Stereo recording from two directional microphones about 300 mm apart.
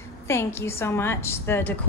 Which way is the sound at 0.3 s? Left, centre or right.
Centre.